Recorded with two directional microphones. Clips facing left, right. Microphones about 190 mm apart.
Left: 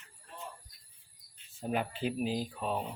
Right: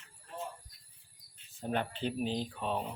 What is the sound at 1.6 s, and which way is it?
Speech, 5° left (ahead or behind).